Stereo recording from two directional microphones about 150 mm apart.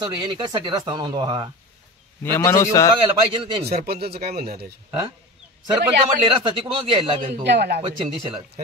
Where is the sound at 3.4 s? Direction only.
40° right (ahead or behind).